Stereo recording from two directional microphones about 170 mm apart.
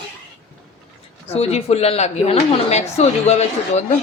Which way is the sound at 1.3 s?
35° left (ahead or behind).